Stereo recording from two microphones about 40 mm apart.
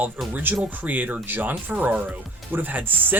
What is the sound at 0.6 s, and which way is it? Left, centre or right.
Speech, right.